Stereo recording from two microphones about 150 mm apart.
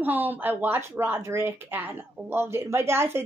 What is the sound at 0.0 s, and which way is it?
A woman's voice, 10° right (ahead or behind).